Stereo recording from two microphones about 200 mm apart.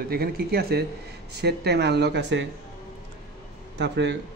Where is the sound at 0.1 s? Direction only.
50° right (ahead or behind).